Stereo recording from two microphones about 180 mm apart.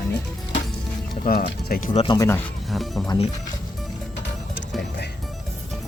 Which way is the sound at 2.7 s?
Centre (ahead or behind).